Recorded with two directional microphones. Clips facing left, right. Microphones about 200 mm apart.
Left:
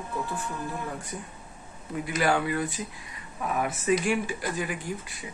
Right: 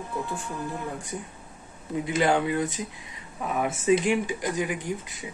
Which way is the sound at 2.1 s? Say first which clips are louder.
Right 2 dB; 20° right (ahead or behind).